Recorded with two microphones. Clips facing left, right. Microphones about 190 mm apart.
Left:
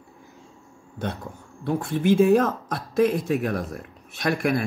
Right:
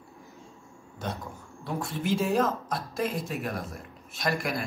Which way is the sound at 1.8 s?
55° left (ahead or behind).